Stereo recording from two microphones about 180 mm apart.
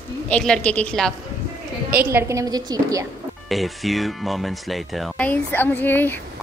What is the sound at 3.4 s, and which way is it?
Speech, centre (ahead or behind).